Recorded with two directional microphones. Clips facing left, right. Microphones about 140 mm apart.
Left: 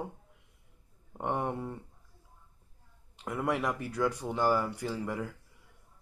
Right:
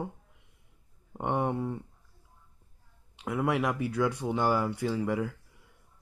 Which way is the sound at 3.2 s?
5° right (ahead or behind).